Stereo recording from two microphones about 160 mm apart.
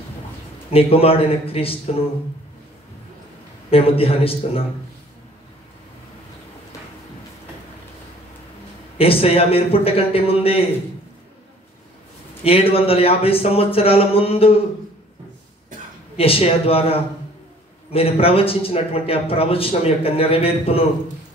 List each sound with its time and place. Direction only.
0.7 s a man's voice: 35° left (ahead or behind)
3.7 s a man's voice: 35° left (ahead or behind)
8.9 s a man's voice: 35° left (ahead or behind)
12.4 s a man's voice: 35° left (ahead or behind)
16.2 s a man's voice: 35° left (ahead or behind)